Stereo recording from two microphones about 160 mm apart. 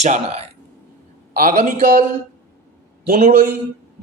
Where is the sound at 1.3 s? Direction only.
65° right (ahead or behind).